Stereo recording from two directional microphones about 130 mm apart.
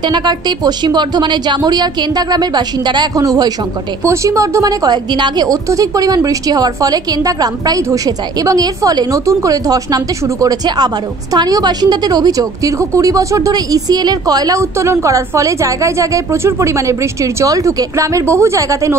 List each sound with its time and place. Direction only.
0.0 s a woman's voice: 35° right (ahead or behind)